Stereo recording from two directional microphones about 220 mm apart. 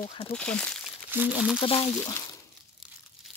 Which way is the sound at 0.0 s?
25° left (ahead or behind).